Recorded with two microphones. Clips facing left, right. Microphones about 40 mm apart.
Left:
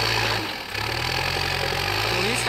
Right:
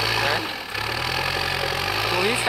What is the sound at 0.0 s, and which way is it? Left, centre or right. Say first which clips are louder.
Vehicle: right 1 dB; centre.